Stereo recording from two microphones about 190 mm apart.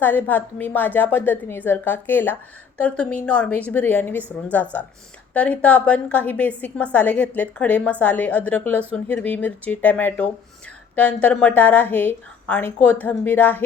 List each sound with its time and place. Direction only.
0.0 s a woman's voice: 10° left (ahead or behind)